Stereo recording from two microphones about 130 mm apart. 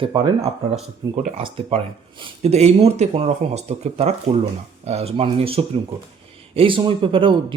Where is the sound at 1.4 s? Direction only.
45° right (ahead or behind).